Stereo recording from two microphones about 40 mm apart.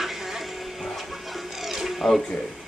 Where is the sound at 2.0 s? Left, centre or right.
Centre.